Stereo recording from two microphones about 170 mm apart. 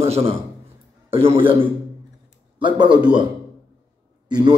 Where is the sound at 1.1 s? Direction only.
30° right (ahead or behind).